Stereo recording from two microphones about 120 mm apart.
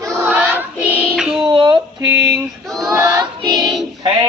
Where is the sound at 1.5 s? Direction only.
45° right (ahead or behind).